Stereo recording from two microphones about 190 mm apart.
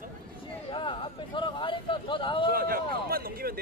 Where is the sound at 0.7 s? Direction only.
25° left (ahead or behind).